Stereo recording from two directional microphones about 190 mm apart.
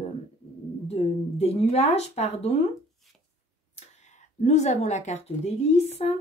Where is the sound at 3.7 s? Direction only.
35° left (ahead or behind).